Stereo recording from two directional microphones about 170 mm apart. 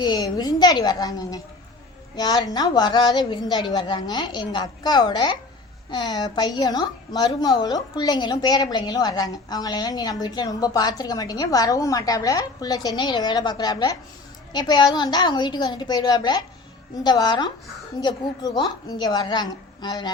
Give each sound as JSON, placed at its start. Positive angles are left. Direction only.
{"t": 0.0, "sound": "a woman's voice", "side_deg": 25}